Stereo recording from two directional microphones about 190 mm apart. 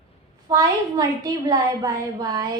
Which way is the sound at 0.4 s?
20° right (ahead or behind).